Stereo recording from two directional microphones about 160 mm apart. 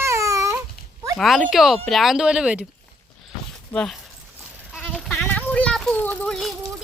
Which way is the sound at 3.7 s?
5° left (ahead or behind).